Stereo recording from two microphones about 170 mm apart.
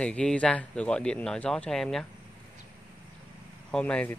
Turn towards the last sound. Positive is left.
turn(degrees=10)  # may be behind; listen again after turning